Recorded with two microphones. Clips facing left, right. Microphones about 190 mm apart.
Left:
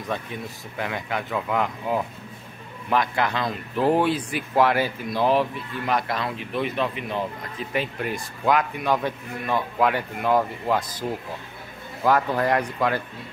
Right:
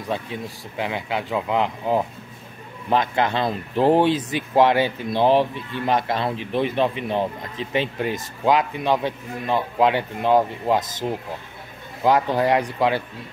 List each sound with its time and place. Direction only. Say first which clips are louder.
0.7 s speech: right 3 dB; 15° right (ahead or behind)